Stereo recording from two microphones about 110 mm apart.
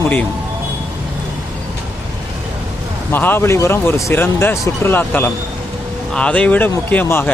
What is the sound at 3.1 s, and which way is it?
Speech, 20° left (ahead or behind).